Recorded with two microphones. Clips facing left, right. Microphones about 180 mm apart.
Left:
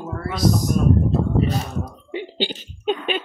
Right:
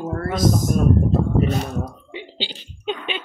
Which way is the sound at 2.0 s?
50° left (ahead or behind).